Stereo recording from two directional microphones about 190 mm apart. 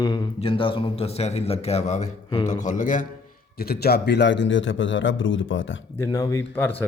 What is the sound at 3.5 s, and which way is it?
A man's voice, 55° left (ahead or behind).